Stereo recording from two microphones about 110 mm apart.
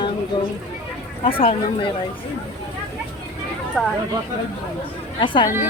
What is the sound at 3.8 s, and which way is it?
Speech, centre (ahead or behind).